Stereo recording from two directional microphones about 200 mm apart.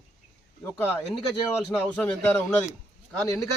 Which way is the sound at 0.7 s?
10° left (ahead or behind).